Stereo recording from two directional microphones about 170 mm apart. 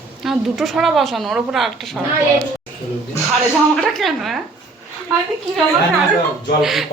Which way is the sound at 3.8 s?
Centre (ahead or behind).